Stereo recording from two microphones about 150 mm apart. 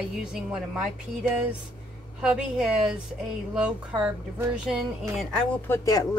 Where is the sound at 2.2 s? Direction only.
5° right (ahead or behind).